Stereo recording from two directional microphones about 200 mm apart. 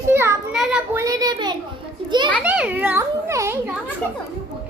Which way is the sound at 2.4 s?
5° right (ahead or behind).